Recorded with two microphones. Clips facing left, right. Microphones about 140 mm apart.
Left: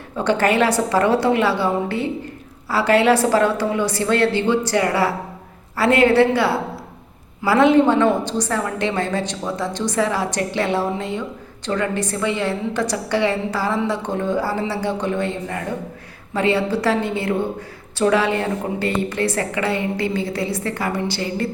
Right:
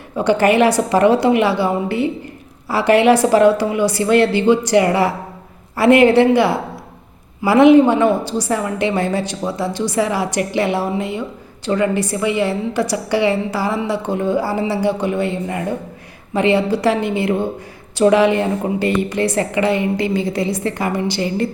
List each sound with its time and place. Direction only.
0.2 s a woman's voice: 10° right (ahead or behind)